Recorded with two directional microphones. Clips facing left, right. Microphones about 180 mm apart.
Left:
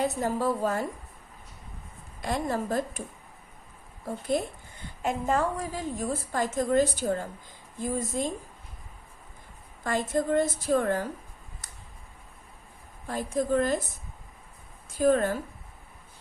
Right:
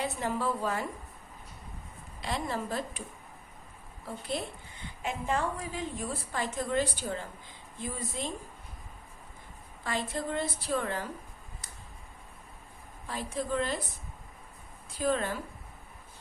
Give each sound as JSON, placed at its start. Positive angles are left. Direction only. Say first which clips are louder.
{"t": 0.0, "sound": "a woman's voice", "louder": "left 5 dB", "side_deg": 40}
{"t": 2.2, "sound": "a woman's voice", "louder": "left 5 dB", "side_deg": 45}
{"t": 4.0, "sound": "a woman's voice", "louder": "left 7 dB", "side_deg": 45}
{"t": 9.8, "sound": "a woman's voice", "louder": "left 6 dB", "side_deg": 45}
{"t": 13.1, "sound": "a woman's voice", "louder": "left 6 dB", "side_deg": 45}